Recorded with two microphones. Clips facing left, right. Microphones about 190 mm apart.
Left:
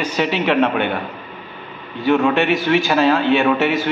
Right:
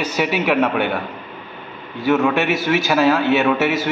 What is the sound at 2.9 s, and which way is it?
Speech, 10° right (ahead or behind).